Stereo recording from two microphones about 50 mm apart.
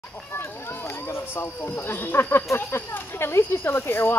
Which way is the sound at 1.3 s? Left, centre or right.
Left.